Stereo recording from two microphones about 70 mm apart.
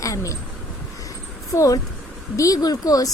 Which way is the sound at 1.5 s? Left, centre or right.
Left.